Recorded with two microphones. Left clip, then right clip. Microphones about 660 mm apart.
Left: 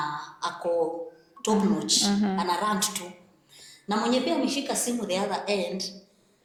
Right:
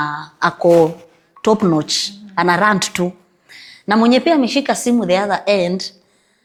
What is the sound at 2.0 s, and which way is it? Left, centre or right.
A woman's voice, right.